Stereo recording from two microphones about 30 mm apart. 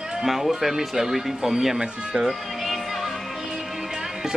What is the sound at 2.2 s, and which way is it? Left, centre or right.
Music, centre.